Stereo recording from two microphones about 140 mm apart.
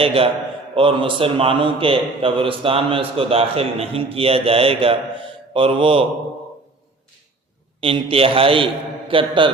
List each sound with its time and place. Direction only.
0.0 s a man's voice: 40° right (ahead or behind)
7.8 s a man's voice: 40° right (ahead or behind)